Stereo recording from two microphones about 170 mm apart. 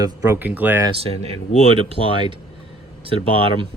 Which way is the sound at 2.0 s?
35° left (ahead or behind).